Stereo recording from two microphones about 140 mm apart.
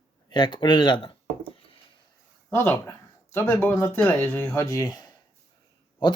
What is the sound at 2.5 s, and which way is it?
Speech, 15° left (ahead or behind).